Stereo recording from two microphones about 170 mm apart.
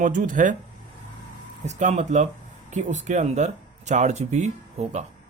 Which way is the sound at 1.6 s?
45° right (ahead or behind).